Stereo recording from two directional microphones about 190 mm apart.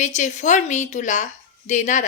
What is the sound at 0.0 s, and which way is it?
A woman's voice, 40° left (ahead or behind).